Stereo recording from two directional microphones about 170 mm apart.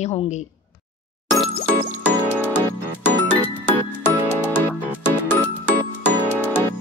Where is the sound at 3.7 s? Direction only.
10° left (ahead or behind).